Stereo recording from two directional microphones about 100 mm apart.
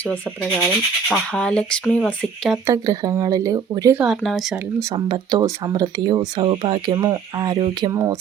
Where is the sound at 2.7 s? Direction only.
40° right (ahead or behind).